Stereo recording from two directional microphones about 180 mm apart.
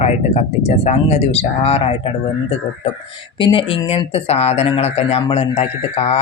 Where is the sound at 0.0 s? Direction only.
35° left (ahead or behind).